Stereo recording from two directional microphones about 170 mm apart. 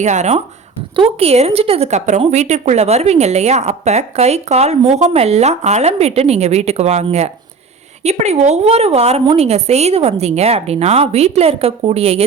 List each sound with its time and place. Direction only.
0.0 s a woman's voice: 40° right (ahead or behind)